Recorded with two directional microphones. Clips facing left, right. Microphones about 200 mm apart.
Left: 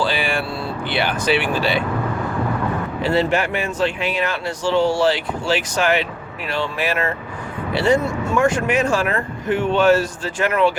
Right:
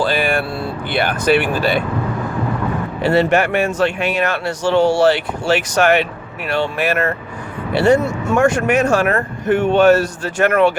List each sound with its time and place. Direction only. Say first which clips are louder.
0.0 s vehicle: right 4 dB; 50° right (ahead or behind)
0.9 s speech: right 4 dB; 50° right (ahead or behind)
3.1 s speech: right 5 dB; 65° right (ahead or behind)
8.7 s speech: right 4 dB; 65° right (ahead or behind)